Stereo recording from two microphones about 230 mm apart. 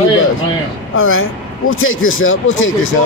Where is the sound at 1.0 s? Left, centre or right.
Left.